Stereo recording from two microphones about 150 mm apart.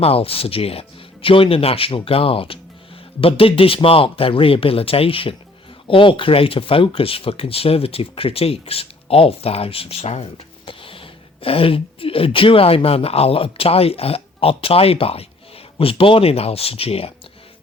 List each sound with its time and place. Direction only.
0.0 s speech: 40° left (ahead or behind)